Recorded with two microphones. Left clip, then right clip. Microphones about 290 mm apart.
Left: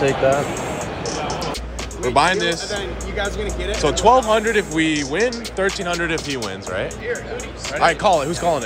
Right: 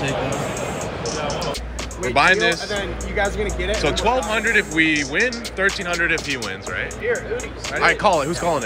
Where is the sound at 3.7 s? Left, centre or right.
Centre.